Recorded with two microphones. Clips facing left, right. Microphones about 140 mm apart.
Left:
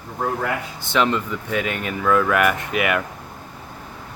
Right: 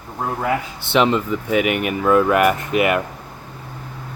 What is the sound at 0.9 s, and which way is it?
Speech, 20° right (ahead or behind).